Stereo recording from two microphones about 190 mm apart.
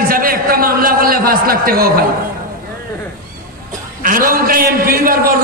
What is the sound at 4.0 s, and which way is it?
A man's voice, 45° right (ahead or behind).